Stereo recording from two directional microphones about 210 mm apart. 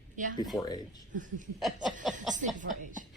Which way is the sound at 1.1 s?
40° right (ahead or behind).